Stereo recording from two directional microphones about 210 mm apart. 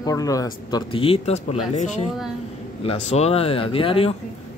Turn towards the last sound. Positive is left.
turn(degrees=25)  # may be behind; listen again after turning